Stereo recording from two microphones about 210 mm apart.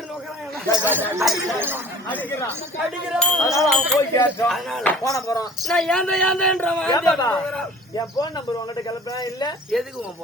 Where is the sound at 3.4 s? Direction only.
15° left (ahead or behind).